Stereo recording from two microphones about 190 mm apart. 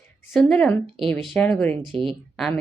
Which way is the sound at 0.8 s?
25° right (ahead or behind).